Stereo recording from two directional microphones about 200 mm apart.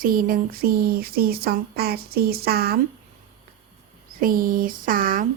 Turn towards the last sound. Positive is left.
turn(degrees=-45)  # may be behind; listen again after turning